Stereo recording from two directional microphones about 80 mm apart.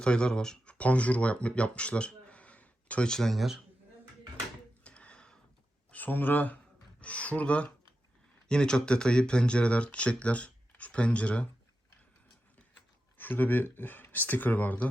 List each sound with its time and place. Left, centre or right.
0.0 s speech: centre
4.8 s a sound: centre
5.9 s speech: left
13.1 s speech: left